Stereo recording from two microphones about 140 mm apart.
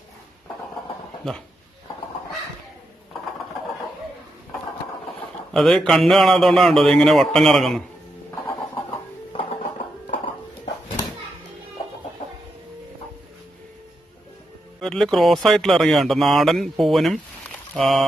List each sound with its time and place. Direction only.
5.5 s speech: 5° left (ahead or behind)
9.3 s music: 40° left (ahead or behind)
14.8 s speech: 5° left (ahead or behind)